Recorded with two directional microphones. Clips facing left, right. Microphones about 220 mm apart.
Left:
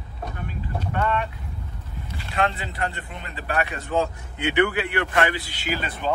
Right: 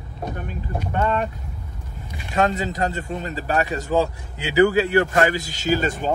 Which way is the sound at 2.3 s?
40° right (ahead or behind).